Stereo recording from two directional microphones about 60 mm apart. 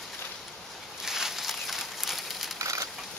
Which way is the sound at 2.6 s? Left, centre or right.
Right.